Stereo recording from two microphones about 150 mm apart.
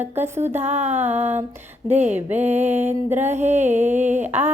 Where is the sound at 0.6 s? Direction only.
45° right (ahead or behind).